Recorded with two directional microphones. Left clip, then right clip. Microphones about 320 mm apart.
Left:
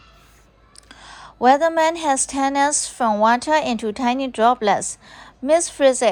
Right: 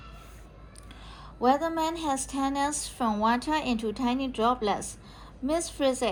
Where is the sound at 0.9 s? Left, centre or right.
Centre.